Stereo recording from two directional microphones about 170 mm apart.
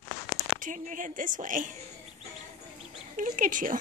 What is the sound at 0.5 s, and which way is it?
Speech, 50° right (ahead or behind).